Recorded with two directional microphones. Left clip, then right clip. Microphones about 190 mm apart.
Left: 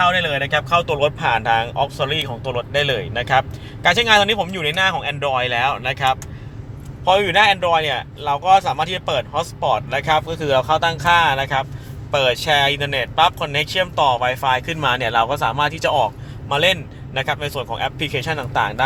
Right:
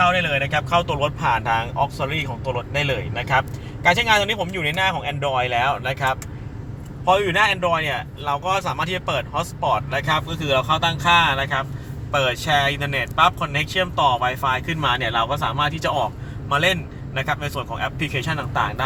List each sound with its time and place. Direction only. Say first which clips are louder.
0.0 s speech: left 1 dB; 55° left (ahead or behind)
7.0 s speech: left 3 dB; 55° left (ahead or behind)
17.2 s speech: left 3 dB; 55° left (ahead or behind)